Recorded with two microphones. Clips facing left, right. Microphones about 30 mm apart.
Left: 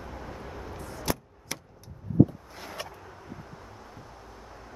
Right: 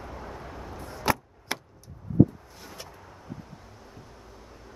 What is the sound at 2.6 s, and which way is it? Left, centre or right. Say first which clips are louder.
Vehicle: left 7 dB; left.